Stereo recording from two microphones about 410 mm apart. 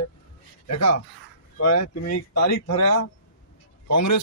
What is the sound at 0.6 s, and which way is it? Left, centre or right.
Speech, left.